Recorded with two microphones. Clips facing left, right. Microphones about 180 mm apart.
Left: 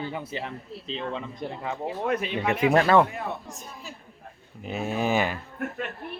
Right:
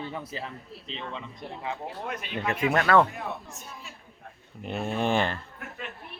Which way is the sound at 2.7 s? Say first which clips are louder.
Left 4 dB; 30° left (ahead or behind).